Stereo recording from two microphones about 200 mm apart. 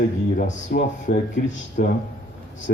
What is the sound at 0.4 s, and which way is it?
Speech, 50° left (ahead or behind).